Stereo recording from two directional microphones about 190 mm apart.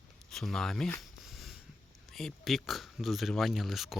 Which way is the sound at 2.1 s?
Centre (ahead or behind).